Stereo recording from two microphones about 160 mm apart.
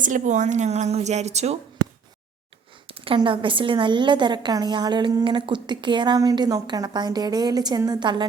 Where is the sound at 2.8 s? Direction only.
35° right (ahead or behind).